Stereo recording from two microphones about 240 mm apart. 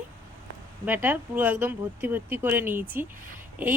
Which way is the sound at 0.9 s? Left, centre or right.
Centre.